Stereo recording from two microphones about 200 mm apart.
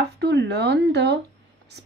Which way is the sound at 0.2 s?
60° right (ahead or behind).